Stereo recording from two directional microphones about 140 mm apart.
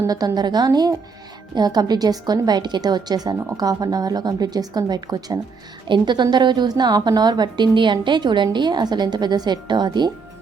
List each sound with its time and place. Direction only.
0.0 s a woman's voice: 25° right (ahead or behind)